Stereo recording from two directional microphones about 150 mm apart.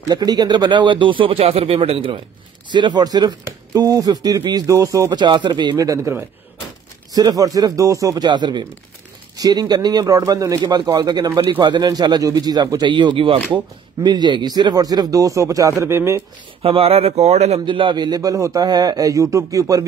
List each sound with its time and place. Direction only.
0.1 s speech: 25° right (ahead or behind)
16.6 s speech: 40° right (ahead or behind)
17.6 s speech: 35° right (ahead or behind)